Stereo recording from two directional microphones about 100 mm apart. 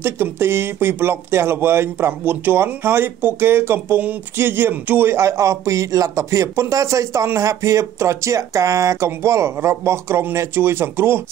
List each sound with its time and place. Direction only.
0.0 s speech: 25° right (ahead or behind)